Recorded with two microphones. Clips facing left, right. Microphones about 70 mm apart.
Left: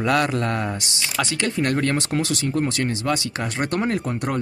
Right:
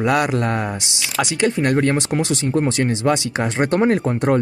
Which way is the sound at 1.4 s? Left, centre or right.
Centre.